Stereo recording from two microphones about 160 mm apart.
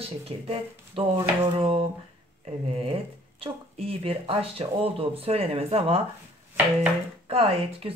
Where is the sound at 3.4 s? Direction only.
35° right (ahead or behind).